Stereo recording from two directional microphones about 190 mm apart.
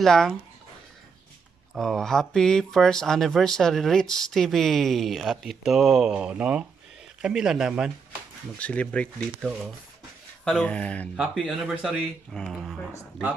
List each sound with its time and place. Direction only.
0.0 s speech: 5° left (ahead or behind)
1.8 s speech: centre (ahead or behind)